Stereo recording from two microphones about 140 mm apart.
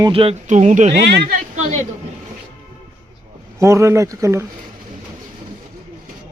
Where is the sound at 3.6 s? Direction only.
20° right (ahead or behind).